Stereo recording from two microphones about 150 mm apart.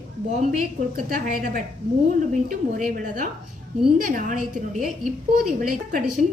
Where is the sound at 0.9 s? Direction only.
60° right (ahead or behind).